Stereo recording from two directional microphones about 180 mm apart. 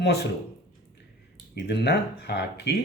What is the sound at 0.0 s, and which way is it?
Speech, 70° left (ahead or behind).